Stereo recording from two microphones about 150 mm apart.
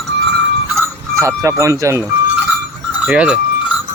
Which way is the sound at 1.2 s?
20° right (ahead or behind).